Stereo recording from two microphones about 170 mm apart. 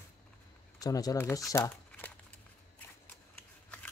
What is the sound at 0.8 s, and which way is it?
Speech, 20° left (ahead or behind).